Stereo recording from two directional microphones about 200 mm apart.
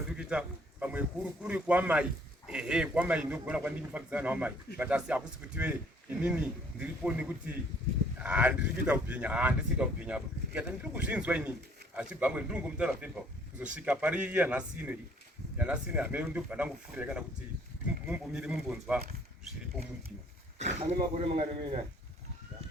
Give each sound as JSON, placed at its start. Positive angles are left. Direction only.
{"t": 0.2, "sound": "speech", "side_deg": -5}
{"t": 20.6, "sound": "speech", "side_deg": -35}